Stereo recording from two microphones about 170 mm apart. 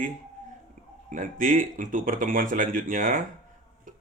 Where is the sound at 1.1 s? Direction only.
50° right (ahead or behind).